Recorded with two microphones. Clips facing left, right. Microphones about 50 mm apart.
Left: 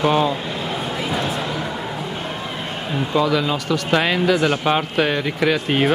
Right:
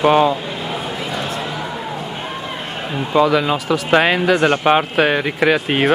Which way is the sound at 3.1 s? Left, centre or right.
Centre.